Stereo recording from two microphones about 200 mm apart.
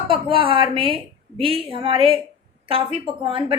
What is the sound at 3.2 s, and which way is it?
Speech, 25° right (ahead or behind).